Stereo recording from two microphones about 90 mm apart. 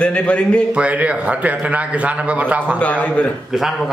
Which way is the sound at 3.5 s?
5° right (ahead or behind).